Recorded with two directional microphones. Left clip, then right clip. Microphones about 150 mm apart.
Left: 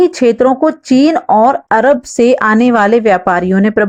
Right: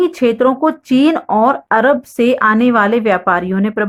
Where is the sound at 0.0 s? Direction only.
30° left (ahead or behind).